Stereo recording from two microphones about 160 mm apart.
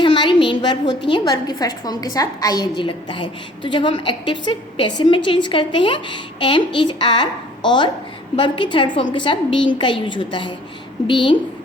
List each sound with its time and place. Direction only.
0.0 s a woman's voice: 30° left (ahead or behind)